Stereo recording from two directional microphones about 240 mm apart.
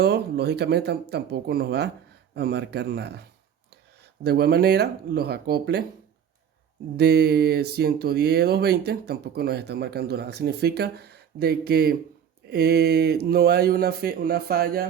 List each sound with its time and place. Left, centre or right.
0.0 s speech: right
6.9 s speech: right